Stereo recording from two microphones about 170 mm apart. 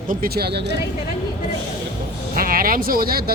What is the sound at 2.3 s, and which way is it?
Speech, 60° right (ahead or behind).